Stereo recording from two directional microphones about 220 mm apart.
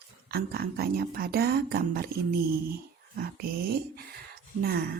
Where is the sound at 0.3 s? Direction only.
45° right (ahead or behind).